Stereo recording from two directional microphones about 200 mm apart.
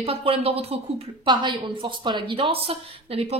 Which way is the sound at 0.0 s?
30° right (ahead or behind).